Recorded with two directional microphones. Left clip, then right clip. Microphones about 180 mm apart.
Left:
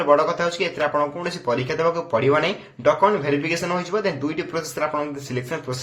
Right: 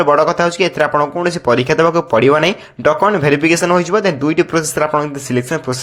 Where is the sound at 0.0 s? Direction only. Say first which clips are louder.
Right 6 dB; 45° right (ahead or behind).